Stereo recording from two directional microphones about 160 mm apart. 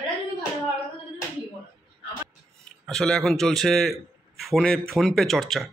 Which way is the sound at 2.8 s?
5° left (ahead or behind).